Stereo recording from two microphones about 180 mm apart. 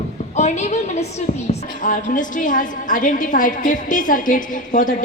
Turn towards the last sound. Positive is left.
turn(degrees=45)  # may be behind; listen again after turning